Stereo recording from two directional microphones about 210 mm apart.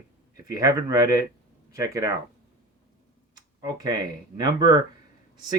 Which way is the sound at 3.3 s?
20° right (ahead or behind).